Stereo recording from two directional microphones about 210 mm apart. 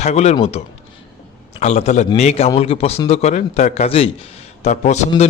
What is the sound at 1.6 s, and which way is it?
A man's voice, 35° left (ahead or behind).